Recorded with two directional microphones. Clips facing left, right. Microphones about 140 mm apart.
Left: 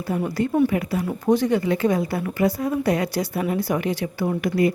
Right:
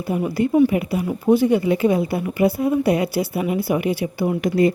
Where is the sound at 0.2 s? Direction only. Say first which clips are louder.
Right 4 dB; 10° right (ahead or behind).